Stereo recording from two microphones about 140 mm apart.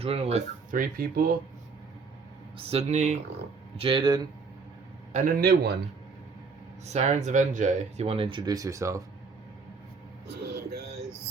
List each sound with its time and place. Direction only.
0.0 s speech: 45° right (ahead or behind)
0.7 s speech: 85° right
2.6 s speech: 45° right (ahead or behind)
3.8 s speech: 35° right (ahead or behind)
5.1 s a man's voice: 75° right (ahead or behind)
6.8 s speech: 55° right (ahead or behind)
8.0 s speech: 40° right (ahead or behind); by 9.0 s 20° right (ahead or behind)
10.4 s music: 90° right